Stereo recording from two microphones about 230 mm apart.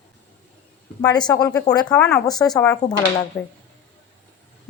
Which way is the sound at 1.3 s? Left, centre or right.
Centre.